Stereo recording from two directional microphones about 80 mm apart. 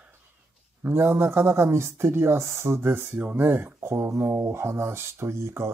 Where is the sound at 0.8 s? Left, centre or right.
Right.